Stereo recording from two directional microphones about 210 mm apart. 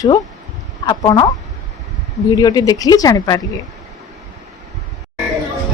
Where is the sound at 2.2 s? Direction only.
20° left (ahead or behind).